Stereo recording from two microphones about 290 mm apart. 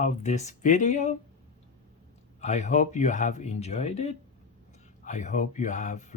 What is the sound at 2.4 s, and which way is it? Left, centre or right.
Speech, left.